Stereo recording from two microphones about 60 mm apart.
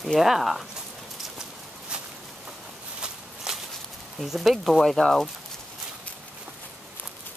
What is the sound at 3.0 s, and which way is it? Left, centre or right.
Walk, centre.